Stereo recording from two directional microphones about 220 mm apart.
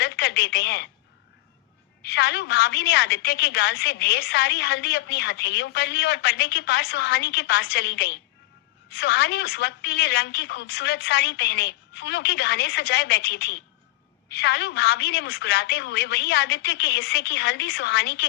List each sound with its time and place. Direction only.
0.0 s speech: 50° left (ahead or behind)
2.0 s a woman's voice: 50° left (ahead or behind)